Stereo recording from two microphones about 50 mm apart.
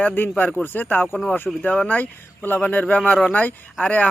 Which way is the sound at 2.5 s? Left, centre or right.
Left.